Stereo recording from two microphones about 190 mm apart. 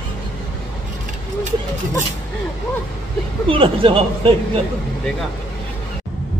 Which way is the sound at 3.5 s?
30° right (ahead or behind).